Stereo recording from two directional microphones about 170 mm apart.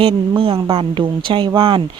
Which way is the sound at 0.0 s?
30° right (ahead or behind).